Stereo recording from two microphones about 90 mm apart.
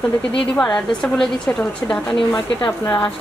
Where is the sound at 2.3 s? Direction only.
35° left (ahead or behind).